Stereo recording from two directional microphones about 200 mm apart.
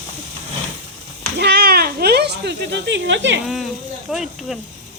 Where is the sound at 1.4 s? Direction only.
55° right (ahead or behind).